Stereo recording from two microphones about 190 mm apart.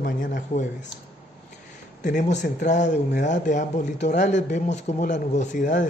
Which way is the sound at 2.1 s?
40° left (ahead or behind).